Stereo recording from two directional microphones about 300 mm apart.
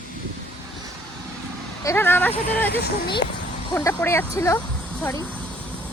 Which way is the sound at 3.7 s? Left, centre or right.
Centre.